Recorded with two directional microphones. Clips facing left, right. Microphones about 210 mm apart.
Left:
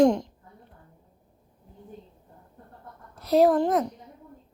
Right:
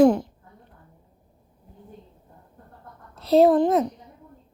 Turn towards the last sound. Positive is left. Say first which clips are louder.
# right 3 dB
turn(degrees=-20)  # may be behind; listen again after turning